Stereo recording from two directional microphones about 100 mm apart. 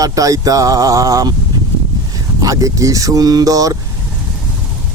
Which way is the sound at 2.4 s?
35° right (ahead or behind).